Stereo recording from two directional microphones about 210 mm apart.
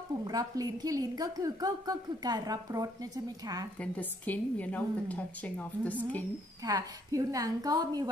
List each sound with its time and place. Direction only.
0.2 s a woman's voice: 15° right (ahead or behind)
3.8 s a woman's voice: 5° left (ahead or behind)
6.6 s a woman's voice: 15° right (ahead or behind)